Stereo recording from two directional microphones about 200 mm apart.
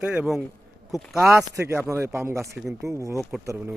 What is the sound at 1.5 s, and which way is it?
Speech, 15° right (ahead or behind).